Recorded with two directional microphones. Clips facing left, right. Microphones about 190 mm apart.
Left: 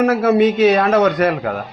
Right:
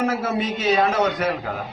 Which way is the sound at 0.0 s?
70° left (ahead or behind).